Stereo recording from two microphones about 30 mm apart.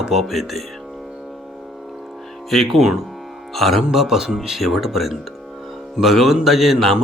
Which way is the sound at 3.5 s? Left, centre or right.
Centre.